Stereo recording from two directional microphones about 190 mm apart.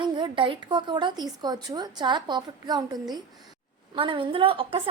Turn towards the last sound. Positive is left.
turn(degrees=-30)  # may be behind; listen again after turning